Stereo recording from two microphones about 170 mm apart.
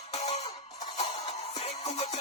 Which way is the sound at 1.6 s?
40° left (ahead or behind).